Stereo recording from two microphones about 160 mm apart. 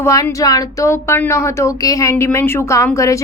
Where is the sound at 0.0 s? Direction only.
20° left (ahead or behind).